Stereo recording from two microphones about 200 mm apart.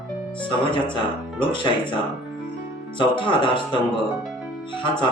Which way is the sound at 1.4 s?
25° left (ahead or behind).